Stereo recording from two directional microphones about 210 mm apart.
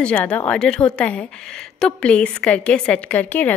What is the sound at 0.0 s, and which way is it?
A woman's voice, 5° left (ahead or behind).